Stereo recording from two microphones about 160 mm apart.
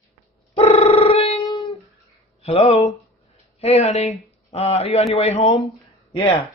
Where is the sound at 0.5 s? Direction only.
40° left (ahead or behind).